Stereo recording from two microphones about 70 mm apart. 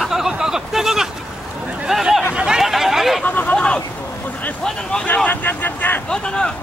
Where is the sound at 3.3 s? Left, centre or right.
Left.